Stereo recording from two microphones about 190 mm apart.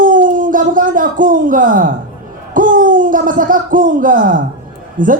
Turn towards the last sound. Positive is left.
turn(degrees=-45)  # may be behind; listen again after turning